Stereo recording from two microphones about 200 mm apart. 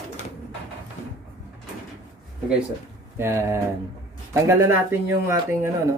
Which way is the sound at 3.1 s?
10° right (ahead or behind).